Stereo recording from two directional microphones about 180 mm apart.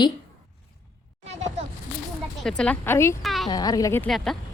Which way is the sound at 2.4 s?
5° left (ahead or behind).